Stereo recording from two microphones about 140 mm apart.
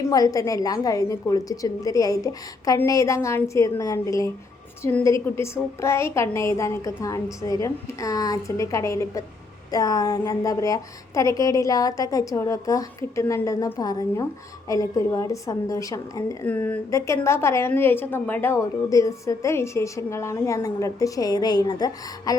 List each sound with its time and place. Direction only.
0.1 s a woman's voice: 25° left (ahead or behind)
16.5 s a woman's voice: 10° left (ahead or behind); by 22.4 s 30° left (ahead or behind)